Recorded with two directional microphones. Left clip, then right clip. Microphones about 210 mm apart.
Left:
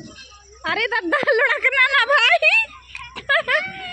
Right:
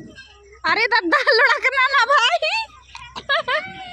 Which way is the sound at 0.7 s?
15° right (ahead or behind).